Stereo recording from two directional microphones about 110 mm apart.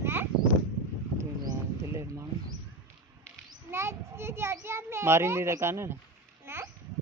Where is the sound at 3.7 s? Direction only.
25° right (ahead or behind).